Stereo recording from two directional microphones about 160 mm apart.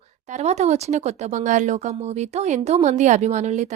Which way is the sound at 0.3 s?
45° right (ahead or behind).